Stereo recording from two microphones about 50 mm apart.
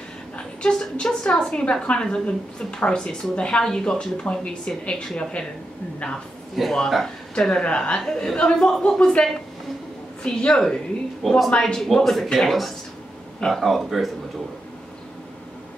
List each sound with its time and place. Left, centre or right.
0.4 s a woman's voice: centre
6.5 s speech: centre
7.3 s a woman's voice: centre
8.0 s a woman's voice: centre
11.2 s speech: centre